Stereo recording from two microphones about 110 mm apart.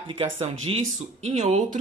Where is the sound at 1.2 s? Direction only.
85° right.